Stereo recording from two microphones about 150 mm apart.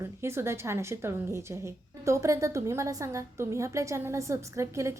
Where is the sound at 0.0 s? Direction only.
15° right (ahead or behind).